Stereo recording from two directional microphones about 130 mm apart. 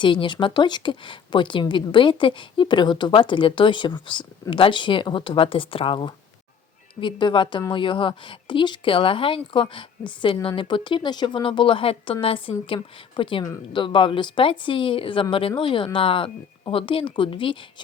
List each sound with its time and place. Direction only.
0.0 s speech: 40° left (ahead or behind)